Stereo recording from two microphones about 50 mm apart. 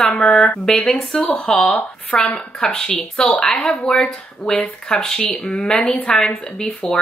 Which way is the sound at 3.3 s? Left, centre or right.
Centre.